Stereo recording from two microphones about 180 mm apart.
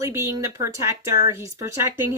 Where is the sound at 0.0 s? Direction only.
15° right (ahead or behind).